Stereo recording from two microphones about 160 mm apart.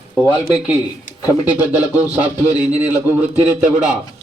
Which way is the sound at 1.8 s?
20° left (ahead or behind).